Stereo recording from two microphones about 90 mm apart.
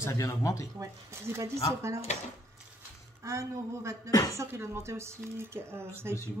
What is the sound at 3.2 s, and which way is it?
Speech, 35° right (ahead or behind).